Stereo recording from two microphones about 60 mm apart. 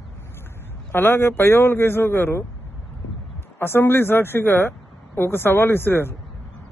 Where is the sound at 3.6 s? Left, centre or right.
Left.